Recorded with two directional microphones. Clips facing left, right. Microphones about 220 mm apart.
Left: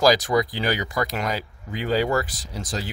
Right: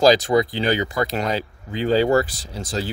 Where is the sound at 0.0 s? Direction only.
25° right (ahead or behind).